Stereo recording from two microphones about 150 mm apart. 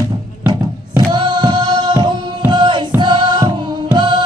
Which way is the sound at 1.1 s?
30° right (ahead or behind).